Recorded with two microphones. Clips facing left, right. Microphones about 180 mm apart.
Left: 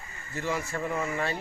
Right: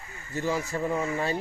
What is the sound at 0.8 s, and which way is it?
Speech, 20° right (ahead or behind).